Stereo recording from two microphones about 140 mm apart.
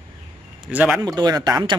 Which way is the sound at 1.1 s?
30° right (ahead or behind).